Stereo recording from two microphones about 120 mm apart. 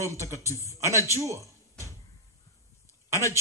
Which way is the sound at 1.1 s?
25° right (ahead or behind).